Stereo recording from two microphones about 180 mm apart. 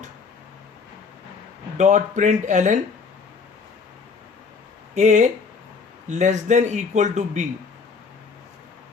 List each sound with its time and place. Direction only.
1.8 s speech: 45° right (ahead or behind)
4.9 s speech: 40° right (ahead or behind)